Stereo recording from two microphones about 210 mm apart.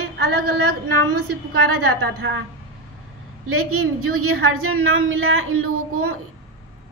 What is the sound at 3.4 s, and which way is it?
A woman's voice, 90° right.